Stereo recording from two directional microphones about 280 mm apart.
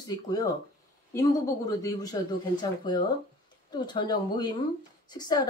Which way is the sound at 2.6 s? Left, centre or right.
Centre.